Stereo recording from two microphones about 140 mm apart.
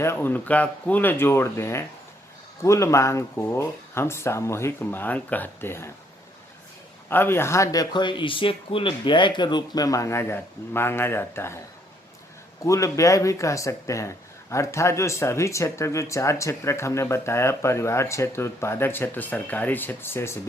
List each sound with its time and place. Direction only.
0.0 s speech: 15° left (ahead or behind)
7.1 s speech: 15° left (ahead or behind)
12.6 s speech: 20° left (ahead or behind)